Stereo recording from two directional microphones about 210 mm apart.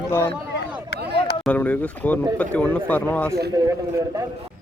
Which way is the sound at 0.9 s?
50° left (ahead or behind).